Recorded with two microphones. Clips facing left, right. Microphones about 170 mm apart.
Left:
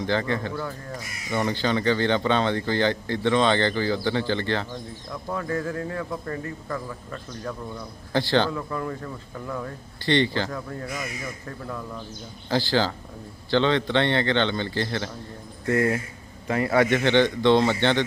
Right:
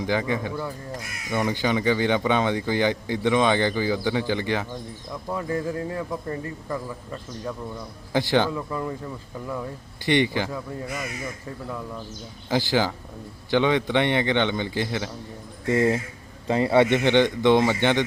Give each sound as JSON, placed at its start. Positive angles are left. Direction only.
{"t": 0.0, "sound": "speech", "side_deg": -10}
{"t": 10.1, "sound": "speech", "side_deg": -15}
{"t": 12.5, "sound": "speech", "side_deg": -15}